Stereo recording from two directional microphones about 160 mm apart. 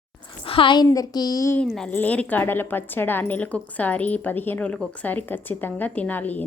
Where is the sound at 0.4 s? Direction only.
35° left (ahead or behind).